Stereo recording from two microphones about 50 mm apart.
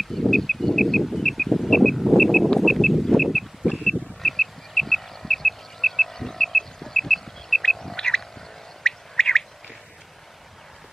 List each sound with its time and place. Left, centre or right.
0.0 s a sound: centre
3.8 s vehicle: centre
8.8 s bird: centre